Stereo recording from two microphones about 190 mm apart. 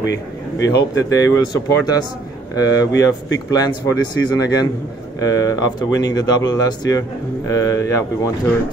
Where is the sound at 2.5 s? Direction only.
20° left (ahead or behind).